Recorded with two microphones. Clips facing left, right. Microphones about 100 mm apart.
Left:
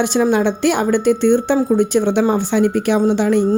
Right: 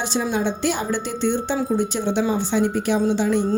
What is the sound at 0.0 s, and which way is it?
Speech, 60° left (ahead or behind).